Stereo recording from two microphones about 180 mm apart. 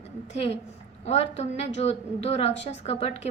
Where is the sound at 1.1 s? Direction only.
35° left (ahead or behind).